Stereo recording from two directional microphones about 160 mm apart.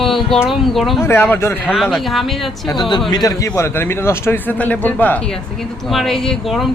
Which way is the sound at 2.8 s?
30° left (ahead or behind).